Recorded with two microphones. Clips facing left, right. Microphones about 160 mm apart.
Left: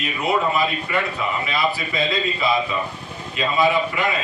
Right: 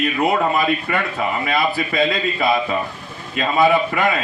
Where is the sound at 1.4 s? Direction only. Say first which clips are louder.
Right 3 dB; 55° right (ahead or behind).